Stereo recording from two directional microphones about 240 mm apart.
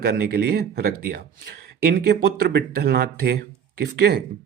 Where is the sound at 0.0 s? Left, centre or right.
Right.